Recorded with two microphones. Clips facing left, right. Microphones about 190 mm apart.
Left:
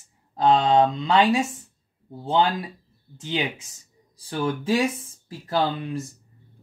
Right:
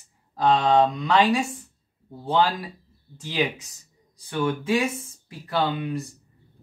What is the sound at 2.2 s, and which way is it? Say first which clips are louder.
Speech: left 1 dB; 25° left (ahead or behind).